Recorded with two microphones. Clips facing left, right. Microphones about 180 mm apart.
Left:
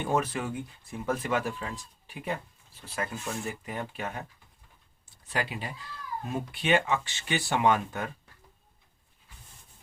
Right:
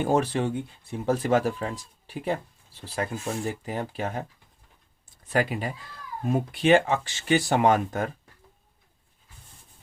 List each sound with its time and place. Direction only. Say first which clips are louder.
0.0 s speech: right 5 dB; 35° right (ahead or behind)
5.1 s speech: right 7 dB; 45° right (ahead or behind)